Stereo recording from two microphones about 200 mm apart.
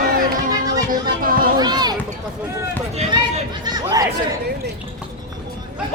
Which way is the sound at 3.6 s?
20° right (ahead or behind).